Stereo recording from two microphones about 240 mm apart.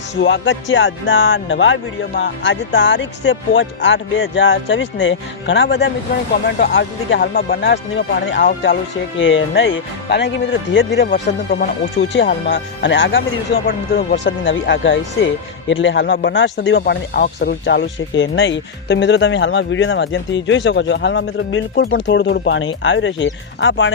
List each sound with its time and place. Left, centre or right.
0.2 s speech: left